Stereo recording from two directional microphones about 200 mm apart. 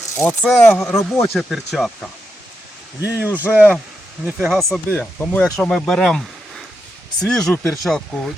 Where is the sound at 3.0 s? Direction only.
10° right (ahead or behind).